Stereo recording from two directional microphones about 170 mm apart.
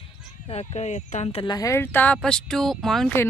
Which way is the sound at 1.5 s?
20° left (ahead or behind).